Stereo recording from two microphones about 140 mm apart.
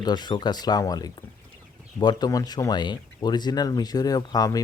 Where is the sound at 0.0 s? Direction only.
30° left (ahead or behind).